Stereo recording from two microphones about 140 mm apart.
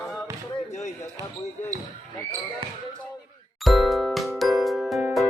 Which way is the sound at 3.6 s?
Centre (ahead or behind).